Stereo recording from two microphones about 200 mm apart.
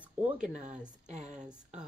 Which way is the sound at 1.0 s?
35° right (ahead or behind).